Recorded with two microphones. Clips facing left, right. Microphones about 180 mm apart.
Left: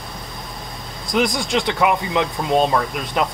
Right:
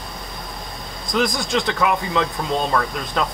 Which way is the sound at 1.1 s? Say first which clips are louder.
Left 1 dB; 15° left (ahead or behind).